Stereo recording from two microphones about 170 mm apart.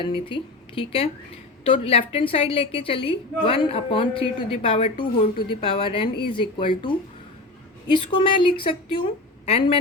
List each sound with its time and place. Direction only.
0.0 s a woman's voice: 30° left (ahead or behind)
8.2 s a woman's voice: 30° left (ahead or behind)